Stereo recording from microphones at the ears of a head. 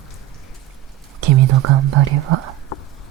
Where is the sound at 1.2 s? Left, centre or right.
Right.